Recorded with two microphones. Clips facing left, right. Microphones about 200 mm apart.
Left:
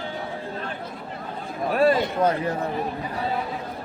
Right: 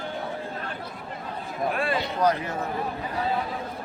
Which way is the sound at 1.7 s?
40° left (ahead or behind).